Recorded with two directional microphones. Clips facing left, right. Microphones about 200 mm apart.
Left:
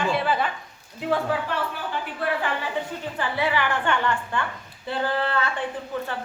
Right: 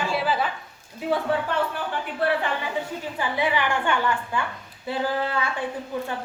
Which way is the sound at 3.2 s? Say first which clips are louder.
Even; 15° right (ahead or behind).